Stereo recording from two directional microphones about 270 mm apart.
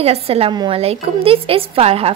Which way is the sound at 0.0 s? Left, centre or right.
Right.